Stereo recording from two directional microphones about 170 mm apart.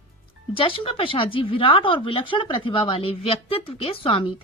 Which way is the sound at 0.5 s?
30° left (ahead or behind).